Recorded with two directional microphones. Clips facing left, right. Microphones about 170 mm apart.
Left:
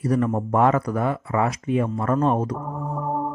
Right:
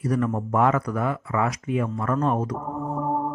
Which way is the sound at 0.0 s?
30° left (ahead or behind).